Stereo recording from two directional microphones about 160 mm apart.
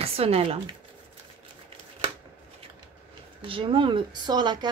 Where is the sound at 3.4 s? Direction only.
30° right (ahead or behind).